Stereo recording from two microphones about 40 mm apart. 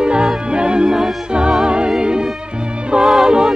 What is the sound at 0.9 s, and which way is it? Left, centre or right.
Music, centre.